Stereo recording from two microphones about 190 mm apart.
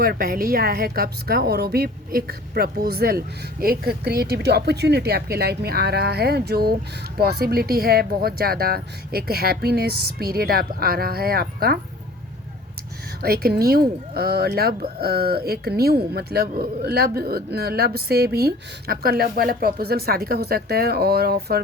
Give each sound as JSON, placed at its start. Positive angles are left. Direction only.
{"t": 0.0, "sound": "speech", "side_deg": -50}
{"t": 13.2, "sound": "speech", "side_deg": -55}